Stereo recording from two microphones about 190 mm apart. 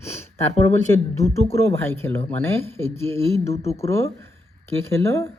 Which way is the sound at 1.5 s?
15° left (ahead or behind).